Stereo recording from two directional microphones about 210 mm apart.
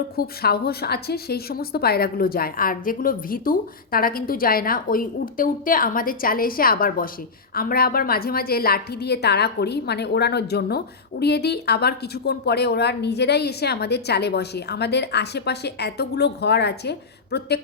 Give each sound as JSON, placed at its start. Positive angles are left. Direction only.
{"t": 0.2, "sound": "a woman's voice", "side_deg": 50}